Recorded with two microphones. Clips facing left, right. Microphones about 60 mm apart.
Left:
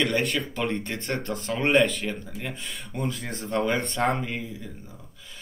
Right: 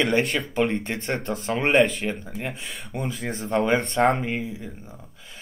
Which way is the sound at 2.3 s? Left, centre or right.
Centre.